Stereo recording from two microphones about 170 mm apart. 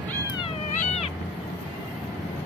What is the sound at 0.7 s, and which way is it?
Cat, 40° left (ahead or behind).